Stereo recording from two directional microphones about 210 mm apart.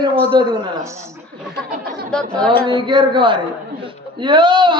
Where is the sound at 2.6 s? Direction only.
20° right (ahead or behind).